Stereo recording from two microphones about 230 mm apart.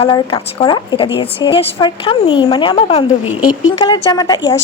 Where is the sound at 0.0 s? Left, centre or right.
Centre.